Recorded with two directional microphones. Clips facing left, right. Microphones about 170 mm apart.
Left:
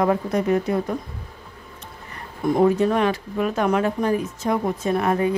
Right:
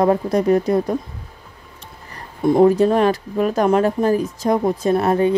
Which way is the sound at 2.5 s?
35° right (ahead or behind).